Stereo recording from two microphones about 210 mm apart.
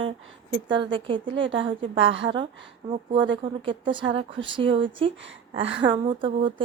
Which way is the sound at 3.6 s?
25° right (ahead or behind).